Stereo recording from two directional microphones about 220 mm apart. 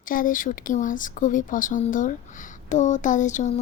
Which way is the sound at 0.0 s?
40° left (ahead or behind).